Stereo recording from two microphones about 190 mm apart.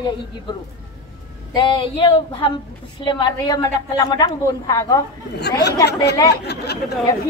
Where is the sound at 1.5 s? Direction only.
25° left (ahead or behind).